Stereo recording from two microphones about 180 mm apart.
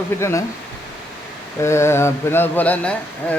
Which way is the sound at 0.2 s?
15° left (ahead or behind).